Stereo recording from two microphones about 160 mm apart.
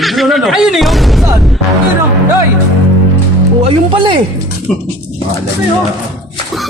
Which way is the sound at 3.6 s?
35° right (ahead or behind).